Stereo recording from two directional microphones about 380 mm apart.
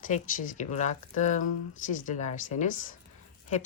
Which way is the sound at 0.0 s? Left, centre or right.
Left.